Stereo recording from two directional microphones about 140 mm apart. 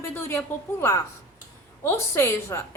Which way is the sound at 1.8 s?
20° left (ahead or behind).